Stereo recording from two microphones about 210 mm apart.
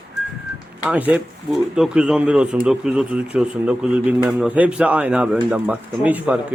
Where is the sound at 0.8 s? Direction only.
5° right (ahead or behind).